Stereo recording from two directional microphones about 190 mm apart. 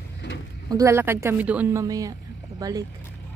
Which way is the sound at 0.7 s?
15° right (ahead or behind).